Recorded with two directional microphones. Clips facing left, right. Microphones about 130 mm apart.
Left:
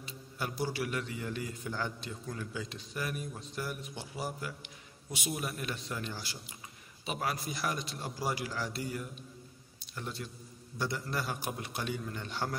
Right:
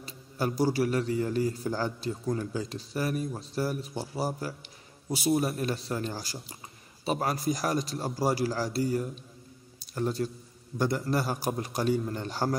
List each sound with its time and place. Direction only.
0.0 s a man's voice: 40° right (ahead or behind)